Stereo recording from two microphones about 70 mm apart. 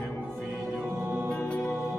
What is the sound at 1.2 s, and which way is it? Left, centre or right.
Music, centre.